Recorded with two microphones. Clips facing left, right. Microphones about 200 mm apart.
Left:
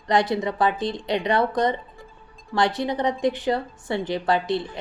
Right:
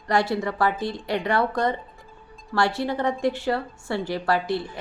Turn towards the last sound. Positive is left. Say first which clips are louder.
# left 1 dB
turn(degrees=20)  # may be behind; listen again after turning